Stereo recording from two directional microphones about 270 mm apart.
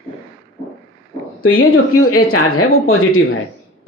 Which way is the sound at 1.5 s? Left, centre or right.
Left.